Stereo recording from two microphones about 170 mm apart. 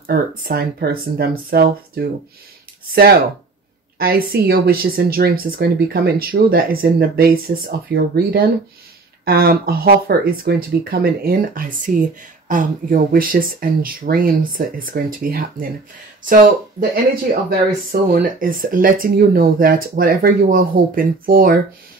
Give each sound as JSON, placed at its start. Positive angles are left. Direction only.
{"t": 0.0, "sound": "speech", "side_deg": -60}
{"t": 16.9, "sound": "speech", "side_deg": -60}